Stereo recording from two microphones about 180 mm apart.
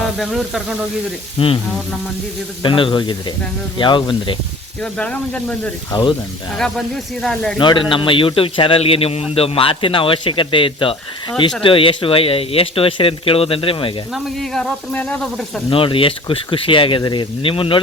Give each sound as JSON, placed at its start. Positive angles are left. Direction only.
{"t": 0.2, "sound": "speech", "side_deg": 0}
{"t": 1.4, "sound": "speech", "side_deg": 35}
{"t": 2.6, "sound": "speech", "side_deg": 30}
{"t": 4.8, "sound": "speech", "side_deg": 5}
{"t": 5.9, "sound": "speech", "side_deg": 25}
{"t": 6.6, "sound": "speech", "side_deg": 0}
{"t": 7.6, "sound": "speech", "side_deg": 25}
{"t": 14.1, "sound": "speech", "side_deg": 0}
{"t": 15.7, "sound": "speech", "side_deg": 30}